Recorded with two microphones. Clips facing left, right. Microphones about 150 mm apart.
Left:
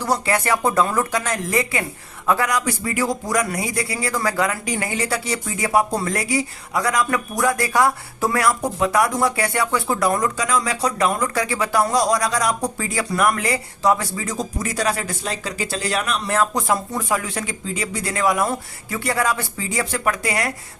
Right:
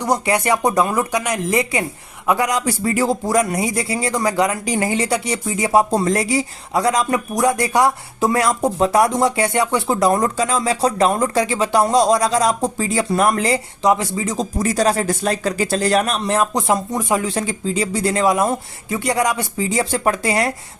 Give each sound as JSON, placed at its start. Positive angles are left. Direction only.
{"t": 0.0, "sound": "a man's voice", "side_deg": -20}
{"t": 14.6, "sound": "speech", "side_deg": -35}
{"t": 15.2, "sound": "speech", "side_deg": -50}
{"t": 16.2, "sound": "a man's voice", "side_deg": -20}